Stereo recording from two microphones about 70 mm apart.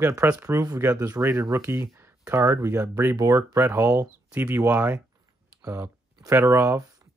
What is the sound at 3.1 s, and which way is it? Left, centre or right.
Speech, right.